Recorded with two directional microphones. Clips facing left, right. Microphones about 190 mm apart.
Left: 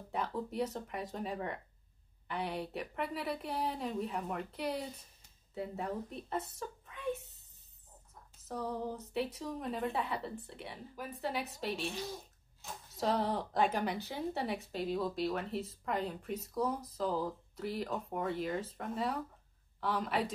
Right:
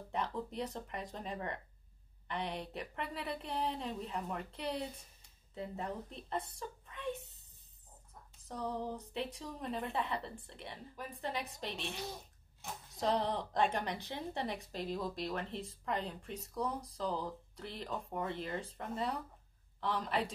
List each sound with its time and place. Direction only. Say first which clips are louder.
0.1 s a woman's voice: left 2 dB; 5° left (ahead or behind)
5.5 s a woman's voice: left 3 dB; 5° left (ahead or behind)
8.5 s a woman's voice: left 1 dB; 5° left (ahead or behind)
13.0 s a woman's voice: left 1 dB; 5° left (ahead or behind)